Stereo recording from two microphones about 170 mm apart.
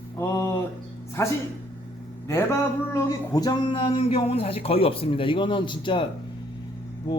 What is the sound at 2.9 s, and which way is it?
A man's voice, 20° left (ahead or behind).